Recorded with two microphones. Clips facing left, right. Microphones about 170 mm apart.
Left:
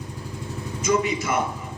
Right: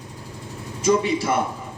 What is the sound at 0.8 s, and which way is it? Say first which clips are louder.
Speech: right 3 dB; 30° right (ahead or behind).